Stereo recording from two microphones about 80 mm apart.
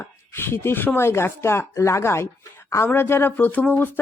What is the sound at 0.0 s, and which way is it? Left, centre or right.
Speech, left.